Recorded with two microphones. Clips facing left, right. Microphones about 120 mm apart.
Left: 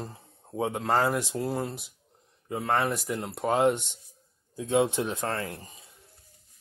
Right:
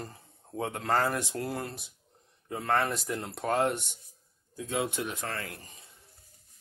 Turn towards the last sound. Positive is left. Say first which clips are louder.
# left 5 dB
turn(degrees=20)  # may be behind; listen again after turning